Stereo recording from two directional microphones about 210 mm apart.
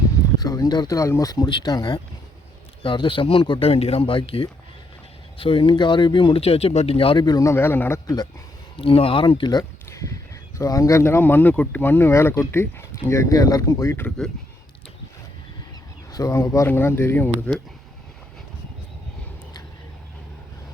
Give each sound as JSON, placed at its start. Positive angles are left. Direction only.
{"t": 0.3, "sound": "speech", "side_deg": 15}
{"t": 16.1, "sound": "speech", "side_deg": 15}